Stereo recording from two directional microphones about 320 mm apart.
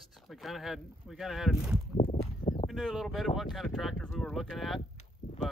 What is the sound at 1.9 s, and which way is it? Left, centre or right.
Walk, left.